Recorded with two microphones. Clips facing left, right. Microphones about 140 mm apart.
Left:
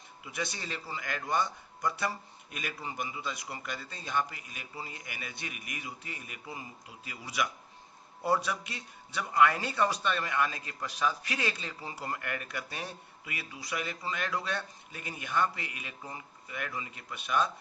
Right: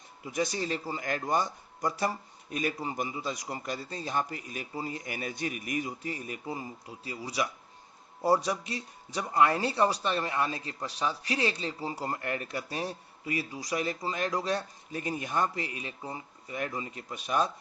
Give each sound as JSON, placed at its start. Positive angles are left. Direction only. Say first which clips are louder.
{"t": 0.3, "sound": "speech", "louder": "right 7 dB", "side_deg": -40}